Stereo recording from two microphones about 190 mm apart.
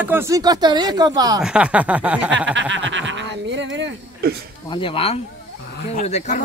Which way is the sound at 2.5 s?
75° right (ahead or behind).